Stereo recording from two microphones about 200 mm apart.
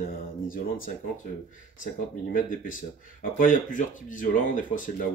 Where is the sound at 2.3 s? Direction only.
40° left (ahead or behind).